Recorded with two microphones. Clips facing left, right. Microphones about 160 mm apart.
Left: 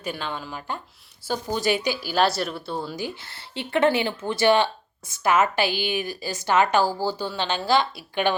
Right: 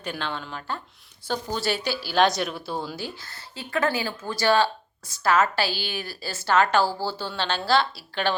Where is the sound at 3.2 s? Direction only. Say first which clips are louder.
Left 5 dB; 25° left (ahead or behind).